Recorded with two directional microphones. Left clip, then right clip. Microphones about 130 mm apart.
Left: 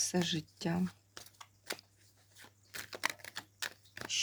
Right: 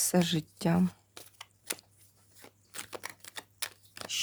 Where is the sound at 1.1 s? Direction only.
35° right (ahead or behind).